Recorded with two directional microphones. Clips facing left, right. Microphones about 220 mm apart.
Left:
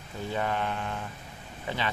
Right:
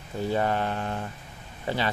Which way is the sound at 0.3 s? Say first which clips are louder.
Right 4 dB; 40° right (ahead or behind).